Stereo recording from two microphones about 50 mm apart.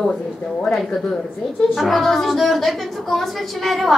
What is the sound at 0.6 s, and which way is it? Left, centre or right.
A man's voice, centre.